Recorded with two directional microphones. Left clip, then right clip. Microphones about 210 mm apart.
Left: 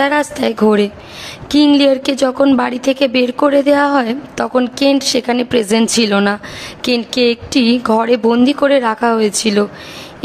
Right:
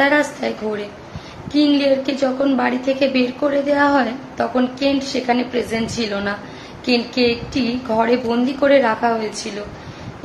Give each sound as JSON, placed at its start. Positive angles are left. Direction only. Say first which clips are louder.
{"t": 0.0, "sound": "a woman's voice", "louder": "left 2 dB", "side_deg": 60}